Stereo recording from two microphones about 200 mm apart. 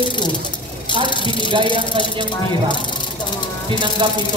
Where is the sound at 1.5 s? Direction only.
25° right (ahead or behind).